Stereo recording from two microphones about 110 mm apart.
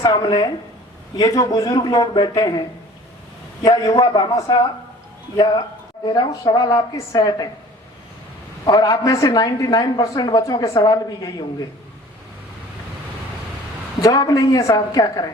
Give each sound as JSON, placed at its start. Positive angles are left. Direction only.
{"t": 0.0, "sound": "a man's voice", "side_deg": 40}
{"t": 5.4, "sound": "a man's voice", "side_deg": 40}
{"t": 8.6, "sound": "a man's voice", "side_deg": 35}
{"t": 14.0, "sound": "a man's voice", "side_deg": 35}